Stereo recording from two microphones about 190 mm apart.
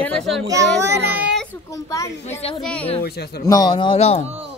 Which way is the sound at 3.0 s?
55° left (ahead or behind).